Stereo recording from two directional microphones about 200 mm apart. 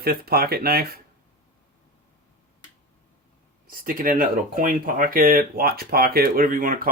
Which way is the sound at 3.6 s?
45° right (ahead or behind).